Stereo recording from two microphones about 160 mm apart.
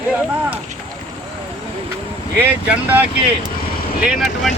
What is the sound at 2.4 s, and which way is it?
Speech, 10° right (ahead or behind).